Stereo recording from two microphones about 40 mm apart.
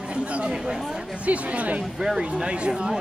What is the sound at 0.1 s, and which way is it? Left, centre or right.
Chatter, right.